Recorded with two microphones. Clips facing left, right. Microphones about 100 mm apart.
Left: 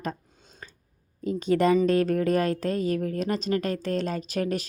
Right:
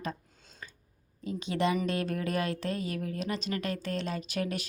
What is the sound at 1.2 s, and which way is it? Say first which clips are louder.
Speech: left 7 dB; 45° left (ahead or behind).